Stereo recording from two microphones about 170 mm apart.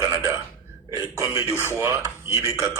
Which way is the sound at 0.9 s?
20° right (ahead or behind).